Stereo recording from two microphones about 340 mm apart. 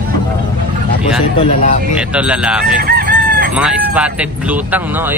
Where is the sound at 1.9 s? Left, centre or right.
Centre.